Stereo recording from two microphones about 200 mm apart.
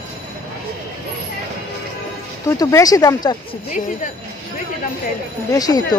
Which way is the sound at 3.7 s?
40° left (ahead or behind).